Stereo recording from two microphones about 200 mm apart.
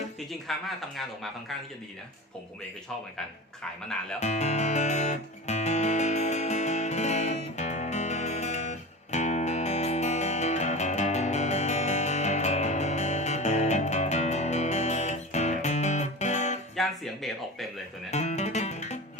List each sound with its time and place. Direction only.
0.5 s speech: centre (ahead or behind)
4.2 s music: 35° left (ahead or behind)
16.7 s a sound: centre (ahead or behind)
18.1 s music: 35° left (ahead or behind)